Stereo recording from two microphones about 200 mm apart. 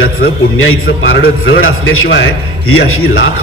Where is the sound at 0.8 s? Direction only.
65° left (ahead or behind).